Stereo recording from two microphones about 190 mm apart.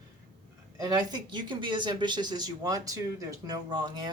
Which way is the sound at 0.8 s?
20° right (ahead or behind).